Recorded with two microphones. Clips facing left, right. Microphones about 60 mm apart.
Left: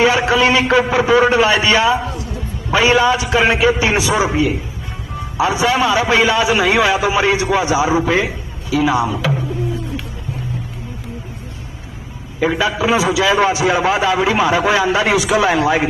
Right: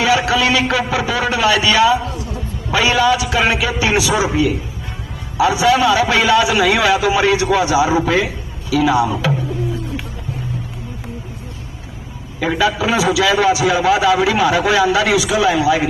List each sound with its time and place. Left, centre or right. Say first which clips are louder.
0.0 s a man's voice: left 2 dB; left
12.5 s a man's voice: right 2 dB; left
15.2 s a man's voice: even; left